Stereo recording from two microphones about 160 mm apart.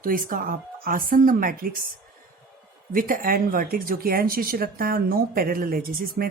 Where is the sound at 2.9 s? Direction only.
60° right (ahead or behind).